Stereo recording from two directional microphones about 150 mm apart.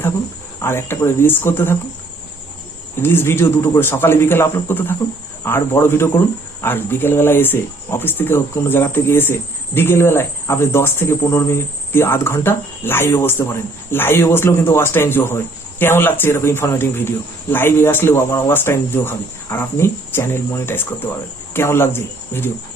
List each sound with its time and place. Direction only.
0.6 s speech: 15° left (ahead or behind)
3.0 s speech: 15° left (ahead or behind)